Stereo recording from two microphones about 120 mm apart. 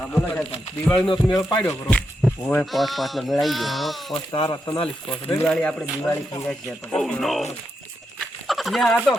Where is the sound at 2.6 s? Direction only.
Centre (ahead or behind).